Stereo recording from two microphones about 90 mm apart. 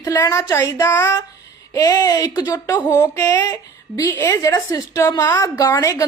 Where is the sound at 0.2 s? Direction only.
35° left (ahead or behind).